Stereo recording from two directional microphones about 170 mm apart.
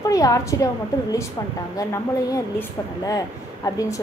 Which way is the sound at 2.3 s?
20° left (ahead or behind).